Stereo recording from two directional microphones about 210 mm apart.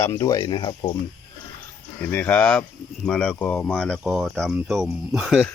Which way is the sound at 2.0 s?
10° left (ahead or behind).